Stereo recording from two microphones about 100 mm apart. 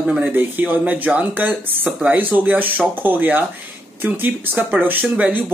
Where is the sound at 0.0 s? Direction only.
10° right (ahead or behind).